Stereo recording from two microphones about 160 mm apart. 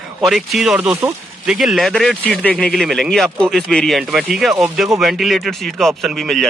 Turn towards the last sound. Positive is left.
turn(degrees=0)  # may be behind; listen again after turning